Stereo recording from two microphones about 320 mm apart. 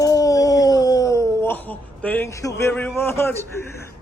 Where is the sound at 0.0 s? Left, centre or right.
Centre.